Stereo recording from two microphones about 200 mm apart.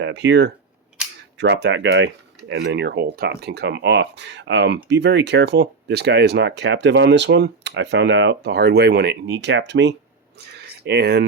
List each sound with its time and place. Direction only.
0.0 s speech: 60° right (ahead or behind)